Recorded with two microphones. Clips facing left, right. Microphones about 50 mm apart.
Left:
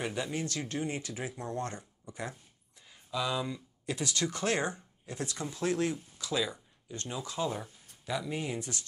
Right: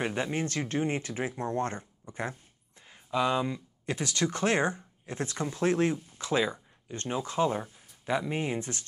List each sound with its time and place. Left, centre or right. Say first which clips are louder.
0.0 s speech: right 4 dB; right
2.9 s a sound: right 6 dB; right
3.8 s speech: right 3 dB; right